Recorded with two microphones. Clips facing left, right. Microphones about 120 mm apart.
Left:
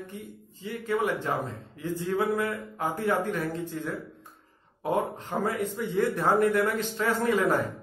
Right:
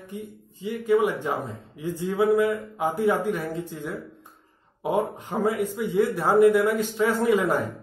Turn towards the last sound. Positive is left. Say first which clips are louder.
# right 3 dB
turn(degrees=-15)  # may be behind; listen again after turning